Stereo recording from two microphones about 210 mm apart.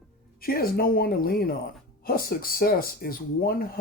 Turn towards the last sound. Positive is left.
turn(degrees=45)  # may be behind; listen again after turning